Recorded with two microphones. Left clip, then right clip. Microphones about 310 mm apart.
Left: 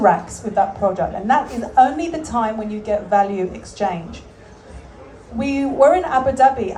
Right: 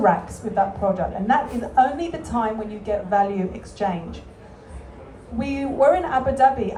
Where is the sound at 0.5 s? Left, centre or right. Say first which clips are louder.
Left 3 dB; left.